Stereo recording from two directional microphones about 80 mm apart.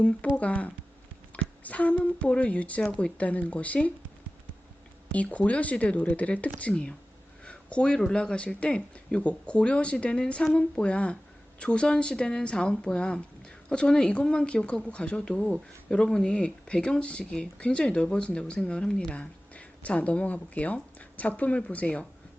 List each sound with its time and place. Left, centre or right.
0.3 s speech: centre
5.1 s speech: centre